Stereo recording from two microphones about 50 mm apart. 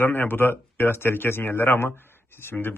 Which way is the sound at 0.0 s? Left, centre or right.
Left.